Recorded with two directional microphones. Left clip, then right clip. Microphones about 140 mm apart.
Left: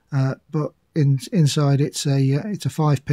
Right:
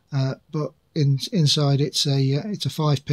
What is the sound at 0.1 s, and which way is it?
Speech, 45° left (ahead or behind).